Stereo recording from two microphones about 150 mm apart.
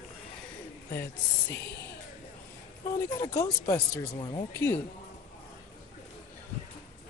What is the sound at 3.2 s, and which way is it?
Speech, 25° left (ahead or behind).